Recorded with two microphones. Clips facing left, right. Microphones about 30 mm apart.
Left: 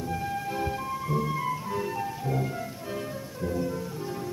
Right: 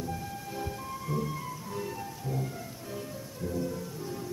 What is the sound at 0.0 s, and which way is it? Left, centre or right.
Music, left.